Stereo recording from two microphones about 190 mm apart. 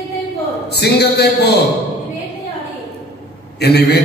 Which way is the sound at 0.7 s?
60° left (ahead or behind).